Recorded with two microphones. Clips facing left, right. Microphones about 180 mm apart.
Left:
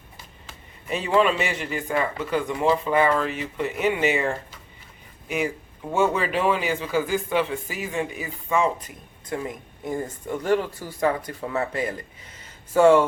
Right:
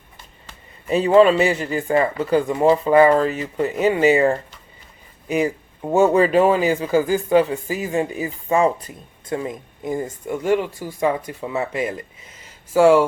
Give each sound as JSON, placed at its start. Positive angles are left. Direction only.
{"t": 0.9, "sound": "speech", "side_deg": -35}
{"t": 9.2, "sound": "speech", "side_deg": -25}
{"t": 9.9, "sound": "speech", "side_deg": -10}